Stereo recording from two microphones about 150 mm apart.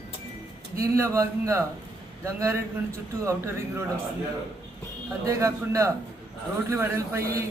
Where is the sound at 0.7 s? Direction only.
20° right (ahead or behind).